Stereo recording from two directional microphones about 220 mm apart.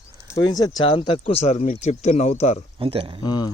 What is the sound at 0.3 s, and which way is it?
Speech, 15° left (ahead or behind).